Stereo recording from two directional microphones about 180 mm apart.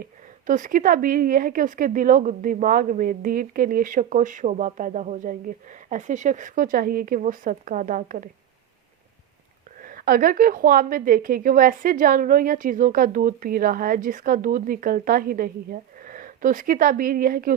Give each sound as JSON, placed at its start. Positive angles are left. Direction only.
{"t": 0.0, "sound": "a woman's voice", "side_deg": -45}
{"t": 9.8, "sound": "a woman's voice", "side_deg": -50}